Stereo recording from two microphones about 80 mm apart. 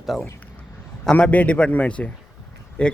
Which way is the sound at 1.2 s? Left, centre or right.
Centre.